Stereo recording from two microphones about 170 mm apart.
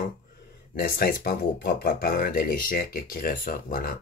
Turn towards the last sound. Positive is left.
turn(degrees=55)  # may be behind; listen again after turning